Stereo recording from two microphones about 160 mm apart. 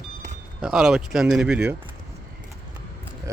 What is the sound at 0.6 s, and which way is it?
Speech, 5° right (ahead or behind).